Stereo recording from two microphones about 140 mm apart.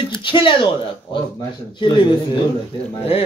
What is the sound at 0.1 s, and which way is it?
Speech, 35° left (ahead or behind).